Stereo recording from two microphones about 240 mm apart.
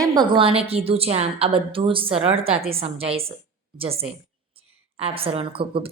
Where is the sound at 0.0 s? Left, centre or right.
Centre.